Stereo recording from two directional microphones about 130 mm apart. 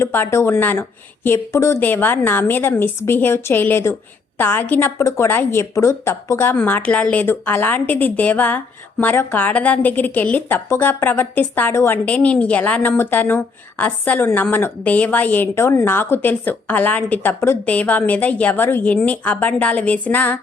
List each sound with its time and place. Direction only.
0.0 s a woman's voice: 20° left (ahead or behind)